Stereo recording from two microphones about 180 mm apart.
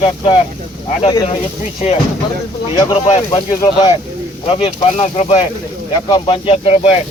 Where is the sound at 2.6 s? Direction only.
30° left (ahead or behind).